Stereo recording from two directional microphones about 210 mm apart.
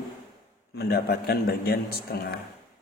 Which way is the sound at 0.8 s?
50° left (ahead or behind).